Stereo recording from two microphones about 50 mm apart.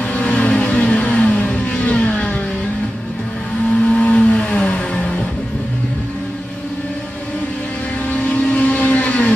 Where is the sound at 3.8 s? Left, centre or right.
Left.